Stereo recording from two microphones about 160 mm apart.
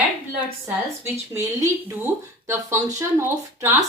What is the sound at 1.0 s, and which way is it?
A woman's voice, 20° right (ahead or behind).